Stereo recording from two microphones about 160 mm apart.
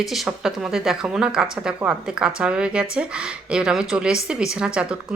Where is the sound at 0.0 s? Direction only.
Centre (ahead or behind).